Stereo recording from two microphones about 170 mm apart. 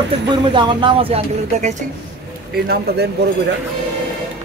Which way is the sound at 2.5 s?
70° right (ahead or behind).